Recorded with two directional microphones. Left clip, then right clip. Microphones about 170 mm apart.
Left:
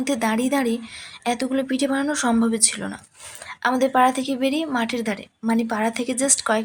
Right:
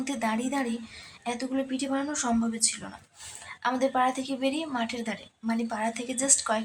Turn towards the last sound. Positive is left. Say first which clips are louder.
# left 6 dB
turn(degrees=35)  # may be behind; listen again after turning